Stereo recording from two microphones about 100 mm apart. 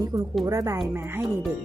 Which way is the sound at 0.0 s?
40° right (ahead or behind).